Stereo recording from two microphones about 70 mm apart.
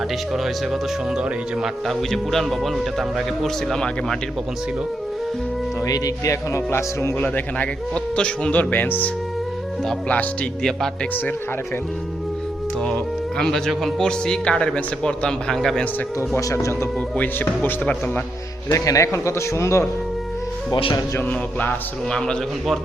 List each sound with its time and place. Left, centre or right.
0.3 s speech: centre
5.8 s a man's voice: left
7.2 s speech: left
8.7 s speech: left
10.6 s speech: centre
11.1 s speech: left
12.8 s speech: centre
16.4 s a man's voice: left
17.2 s speech: left
18.7 s a man's voice: left
21.2 s speech: left
22.1 s speech: centre